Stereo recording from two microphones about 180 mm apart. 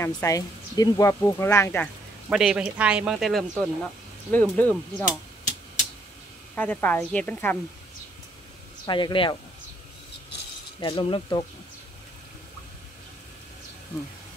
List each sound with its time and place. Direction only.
0.0 s speech: 20° left (ahead or behind)
2.2 s speech: 5° right (ahead or behind)
6.5 s speech: 10° left (ahead or behind)
8.8 s speech: 25° left (ahead or behind)
10.8 s speech: 25° left (ahead or behind)